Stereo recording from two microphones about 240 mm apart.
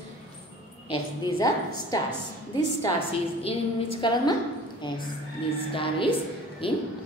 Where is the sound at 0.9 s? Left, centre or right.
Centre.